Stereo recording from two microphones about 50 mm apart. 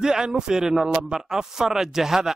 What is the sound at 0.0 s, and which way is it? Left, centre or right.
Speech, centre.